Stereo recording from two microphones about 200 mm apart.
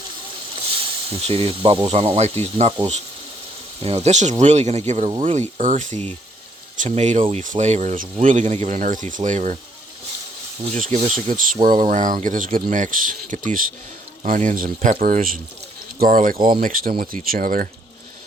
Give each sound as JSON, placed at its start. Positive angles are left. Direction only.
{"t": 1.1, "sound": "speech", "side_deg": -30}
{"t": 10.8, "sound": "speech", "side_deg": -35}